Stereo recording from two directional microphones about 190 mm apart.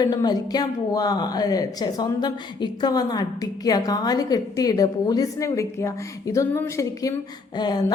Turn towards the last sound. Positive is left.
turn(degrees=20)  # may be behind; listen again after turning